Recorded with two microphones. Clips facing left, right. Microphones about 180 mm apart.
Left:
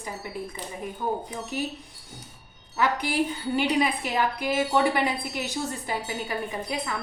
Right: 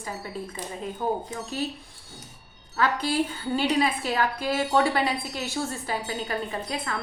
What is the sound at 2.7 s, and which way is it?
A woman's voice, 15° left (ahead or behind).